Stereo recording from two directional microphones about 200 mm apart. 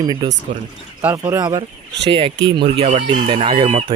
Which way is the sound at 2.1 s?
25° right (ahead or behind).